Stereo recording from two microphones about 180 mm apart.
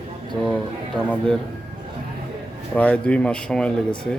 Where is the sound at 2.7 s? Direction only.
5° left (ahead or behind).